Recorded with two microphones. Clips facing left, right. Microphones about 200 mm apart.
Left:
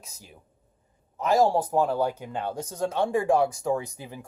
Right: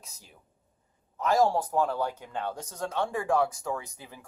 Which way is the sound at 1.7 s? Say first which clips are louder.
Left 4 dB; 10° left (ahead or behind).